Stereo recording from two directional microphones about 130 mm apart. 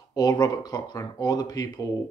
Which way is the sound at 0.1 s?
30° left (ahead or behind).